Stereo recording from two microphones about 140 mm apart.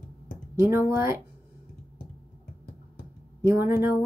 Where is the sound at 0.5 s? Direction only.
15° right (ahead or behind).